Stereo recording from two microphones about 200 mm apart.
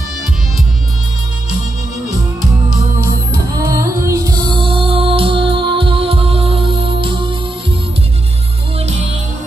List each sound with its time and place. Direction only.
3.5 s music: 15° right (ahead or behind)